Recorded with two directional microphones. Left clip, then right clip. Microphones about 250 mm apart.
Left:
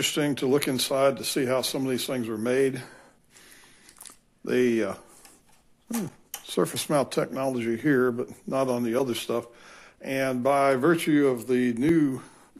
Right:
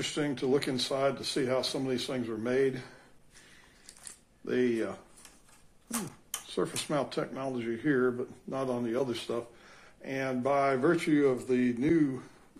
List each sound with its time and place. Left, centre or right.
0.0 s speech: left
4.5 s speech: left
6.4 s speech: left